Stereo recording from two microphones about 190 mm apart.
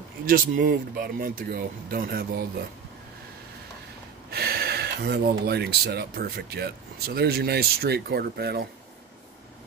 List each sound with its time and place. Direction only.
0.2 s speech: 50° right (ahead or behind)
4.3 s speech: 55° right (ahead or behind)